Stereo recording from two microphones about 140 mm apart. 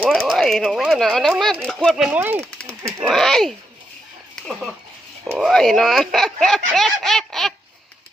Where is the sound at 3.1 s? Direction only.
5° left (ahead or behind).